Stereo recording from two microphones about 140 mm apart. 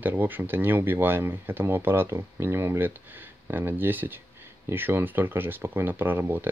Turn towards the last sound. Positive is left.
turn(degrees=-15)  # may be behind; listen again after turning